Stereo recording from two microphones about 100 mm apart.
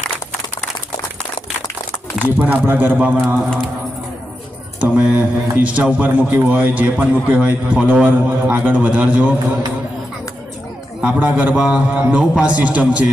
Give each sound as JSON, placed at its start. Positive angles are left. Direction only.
{"t": 2.1, "sound": "a man's voice", "side_deg": -20}
{"t": 4.8, "sound": "a man's voice", "side_deg": -15}
{"t": 11.0, "sound": "a man's voice", "side_deg": -15}